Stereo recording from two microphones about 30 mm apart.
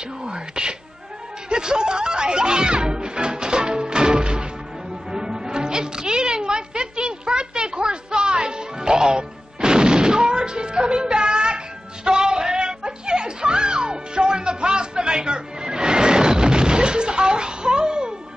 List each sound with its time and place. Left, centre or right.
0.2 s a sound: right
1.5 s speech: right
5.1 s music: right